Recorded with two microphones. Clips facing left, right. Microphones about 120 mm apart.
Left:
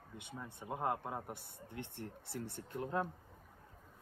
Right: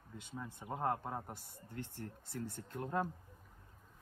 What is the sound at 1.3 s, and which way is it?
Speech, 60° left (ahead or behind).